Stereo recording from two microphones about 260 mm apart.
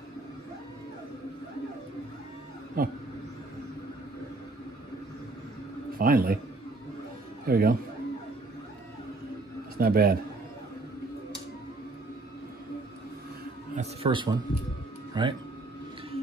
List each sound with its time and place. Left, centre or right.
2.8 s a man's voice: right
5.9 s a man's voice: right
7.4 s a man's voice: right
9.8 s a man's voice: right
13.7 s a sound: centre
15.2 s speech: centre